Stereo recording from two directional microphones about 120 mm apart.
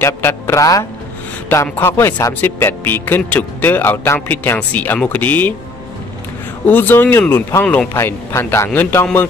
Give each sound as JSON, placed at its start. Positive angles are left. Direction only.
{"t": 0.0, "sound": "a man's voice", "side_deg": 20}
{"t": 6.6, "sound": "a man's voice", "side_deg": 15}